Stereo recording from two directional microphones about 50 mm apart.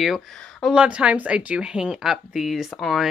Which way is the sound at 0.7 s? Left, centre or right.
Right.